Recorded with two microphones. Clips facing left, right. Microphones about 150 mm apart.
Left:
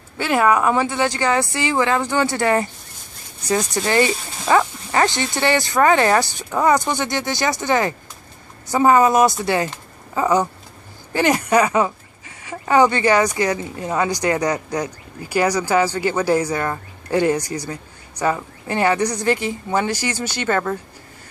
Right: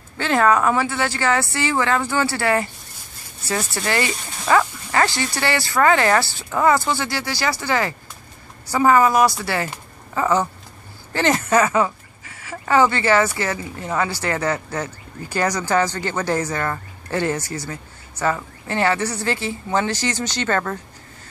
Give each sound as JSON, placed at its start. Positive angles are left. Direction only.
{"t": 0.2, "sound": "speech", "side_deg": 10}